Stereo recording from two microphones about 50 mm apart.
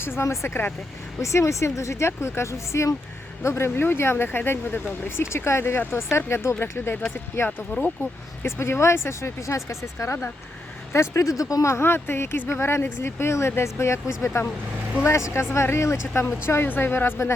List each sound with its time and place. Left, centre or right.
0.0 s speech: left
1.2 s speech: left
3.4 s speech: left
6.6 s speech: left
8.4 s speech: left
11.9 s speech: left
15.3 s speech: left
16.6 s speech: left